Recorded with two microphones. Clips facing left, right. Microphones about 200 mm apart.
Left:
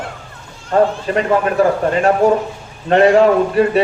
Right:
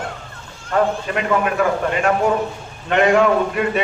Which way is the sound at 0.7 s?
35° left (ahead or behind).